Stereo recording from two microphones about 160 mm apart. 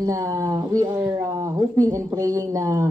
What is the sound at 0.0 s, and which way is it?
Speech, 20° right (ahead or behind).